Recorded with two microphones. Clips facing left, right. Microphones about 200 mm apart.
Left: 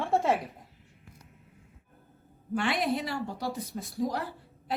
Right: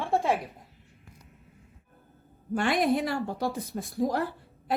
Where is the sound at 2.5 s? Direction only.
45° right (ahead or behind).